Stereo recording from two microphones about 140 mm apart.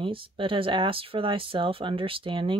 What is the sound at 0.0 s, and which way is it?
Speech, 40° right (ahead or behind).